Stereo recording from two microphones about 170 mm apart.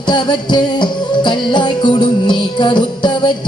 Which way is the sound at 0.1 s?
25° left (ahead or behind).